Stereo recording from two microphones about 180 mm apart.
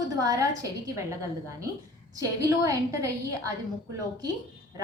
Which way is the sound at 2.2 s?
20° right (ahead or behind).